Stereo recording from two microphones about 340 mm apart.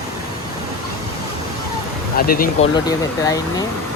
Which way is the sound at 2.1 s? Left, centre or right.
Left.